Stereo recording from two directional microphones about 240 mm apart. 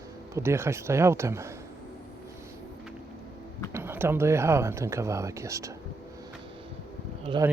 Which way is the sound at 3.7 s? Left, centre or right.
Centre.